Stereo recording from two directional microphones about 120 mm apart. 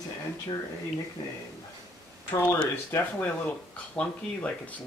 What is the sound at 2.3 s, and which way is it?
Speech, 20° left (ahead or behind).